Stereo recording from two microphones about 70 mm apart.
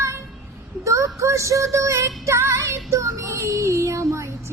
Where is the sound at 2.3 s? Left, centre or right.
Right.